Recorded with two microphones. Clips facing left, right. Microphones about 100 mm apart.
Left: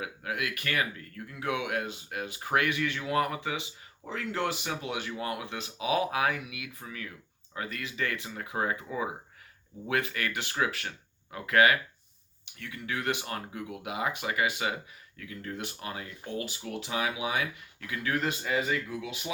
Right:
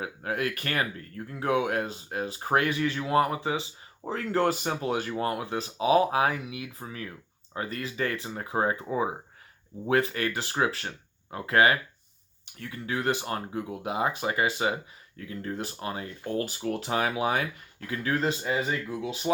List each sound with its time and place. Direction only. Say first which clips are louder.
0.0 s speech: right 4 dB; 35° right (ahead or behind)
16.3 s speech: right 6 dB; 45° right (ahead or behind)